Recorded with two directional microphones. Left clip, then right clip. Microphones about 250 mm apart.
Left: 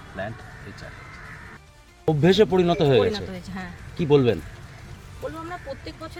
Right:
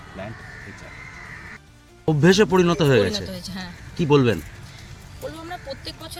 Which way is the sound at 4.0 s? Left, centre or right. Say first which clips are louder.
Right 1 dB; right.